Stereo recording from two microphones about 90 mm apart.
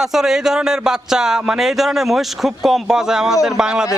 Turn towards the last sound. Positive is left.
turn(degrees=-10)  # may be behind; listen again after turning